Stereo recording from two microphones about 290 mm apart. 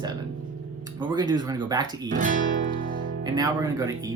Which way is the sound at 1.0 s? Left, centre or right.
Centre.